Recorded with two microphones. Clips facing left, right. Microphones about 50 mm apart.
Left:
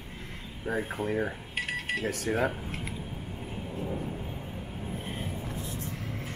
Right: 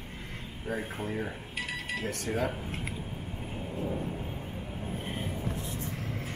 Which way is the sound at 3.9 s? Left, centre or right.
Centre.